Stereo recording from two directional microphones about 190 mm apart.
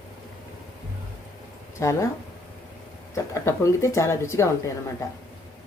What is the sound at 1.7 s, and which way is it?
Speech, 15° left (ahead or behind).